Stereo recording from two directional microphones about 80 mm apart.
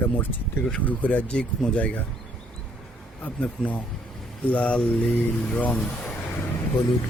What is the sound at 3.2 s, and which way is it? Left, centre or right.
Speech, centre.